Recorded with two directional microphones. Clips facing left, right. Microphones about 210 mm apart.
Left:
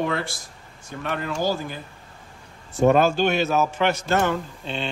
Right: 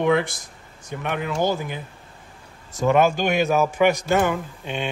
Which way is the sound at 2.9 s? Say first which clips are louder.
Right 1 dB; 15° right (ahead or behind).